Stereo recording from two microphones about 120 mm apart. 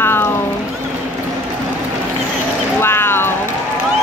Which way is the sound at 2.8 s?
20° left (ahead or behind).